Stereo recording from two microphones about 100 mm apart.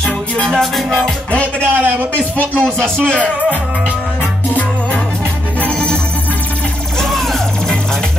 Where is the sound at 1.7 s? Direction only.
20° right (ahead or behind).